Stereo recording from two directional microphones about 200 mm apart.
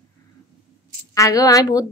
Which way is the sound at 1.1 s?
15° left (ahead or behind).